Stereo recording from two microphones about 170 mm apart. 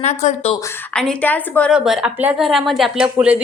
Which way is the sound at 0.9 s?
5° left (ahead or behind).